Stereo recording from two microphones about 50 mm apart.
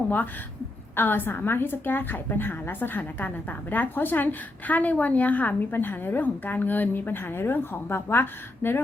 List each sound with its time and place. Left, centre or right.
0.9 s a woman's voice: left
5.7 s a woman's voice: left